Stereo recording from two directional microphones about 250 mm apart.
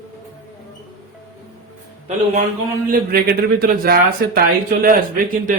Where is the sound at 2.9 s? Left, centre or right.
Right.